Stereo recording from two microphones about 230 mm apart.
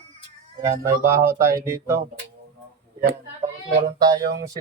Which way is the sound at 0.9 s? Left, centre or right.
Centre.